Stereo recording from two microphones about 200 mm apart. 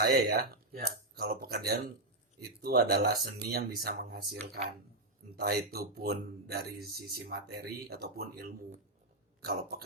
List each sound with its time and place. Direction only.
0.0 s speech: 50° right (ahead or behind)
5.4 s speech: 50° right (ahead or behind)